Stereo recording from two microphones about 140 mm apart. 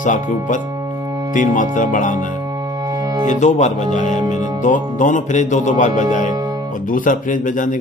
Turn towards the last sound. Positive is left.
turn(degrees=70)  # may be behind; listen again after turning